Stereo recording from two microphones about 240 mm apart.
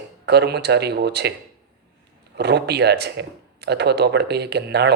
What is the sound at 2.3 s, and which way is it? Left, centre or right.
Speech, right.